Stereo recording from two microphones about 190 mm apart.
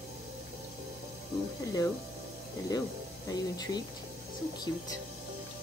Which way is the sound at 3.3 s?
20° left (ahead or behind).